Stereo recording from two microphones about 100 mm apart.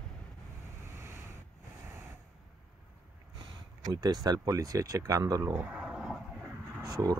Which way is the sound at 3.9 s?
40° right (ahead or behind).